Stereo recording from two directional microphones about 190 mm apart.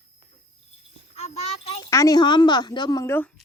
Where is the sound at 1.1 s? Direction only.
35° left (ahead or behind).